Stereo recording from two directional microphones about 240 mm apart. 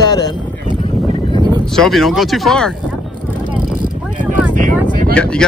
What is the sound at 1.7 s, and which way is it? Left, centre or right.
Speech, centre.